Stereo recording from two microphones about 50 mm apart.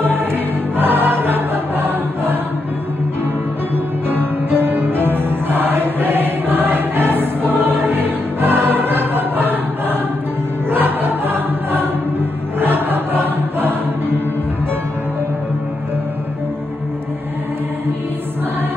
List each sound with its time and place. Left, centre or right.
0.0 s choir: right
4.5 s music: right
10.7 s choir: right